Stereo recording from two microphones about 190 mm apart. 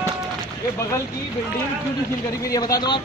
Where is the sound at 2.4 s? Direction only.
20° left (ahead or behind).